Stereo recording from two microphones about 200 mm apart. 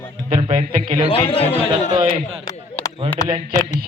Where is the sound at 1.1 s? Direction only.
25° left (ahead or behind).